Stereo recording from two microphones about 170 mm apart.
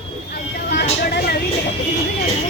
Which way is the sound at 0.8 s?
70° left (ahead or behind).